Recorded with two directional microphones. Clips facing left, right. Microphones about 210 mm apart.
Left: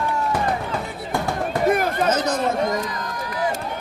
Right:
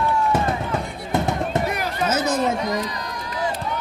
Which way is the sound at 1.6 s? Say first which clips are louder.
Left 5 dB; 50° left (ahead or behind).